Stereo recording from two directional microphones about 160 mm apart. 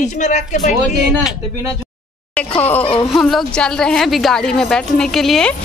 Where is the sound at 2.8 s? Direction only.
35° left (ahead or behind).